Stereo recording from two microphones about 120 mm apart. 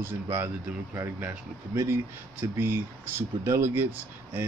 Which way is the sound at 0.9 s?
20° right (ahead or behind).